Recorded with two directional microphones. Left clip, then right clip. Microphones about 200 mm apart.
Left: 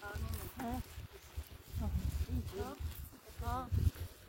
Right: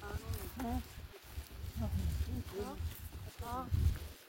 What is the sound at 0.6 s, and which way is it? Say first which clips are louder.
Insect: right 1 dB; 15° left (ahead or behind).